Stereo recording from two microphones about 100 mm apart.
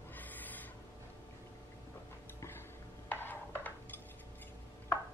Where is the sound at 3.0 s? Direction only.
20° left (ahead or behind).